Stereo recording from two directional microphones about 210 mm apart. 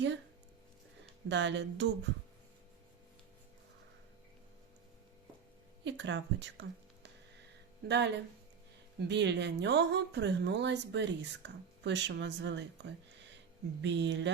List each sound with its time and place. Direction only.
1.3 s speech: 60° right (ahead or behind)
5.8 s speech: 60° right (ahead or behind)
7.9 s speech: 55° right (ahead or behind)